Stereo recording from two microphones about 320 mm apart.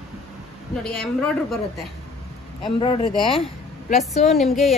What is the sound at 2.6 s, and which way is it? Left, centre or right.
Speech, centre.